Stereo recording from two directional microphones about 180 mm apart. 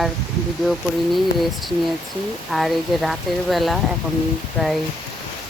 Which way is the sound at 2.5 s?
Centre (ahead or behind).